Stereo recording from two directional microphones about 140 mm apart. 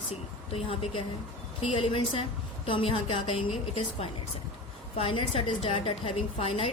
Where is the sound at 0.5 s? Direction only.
40° left (ahead or behind).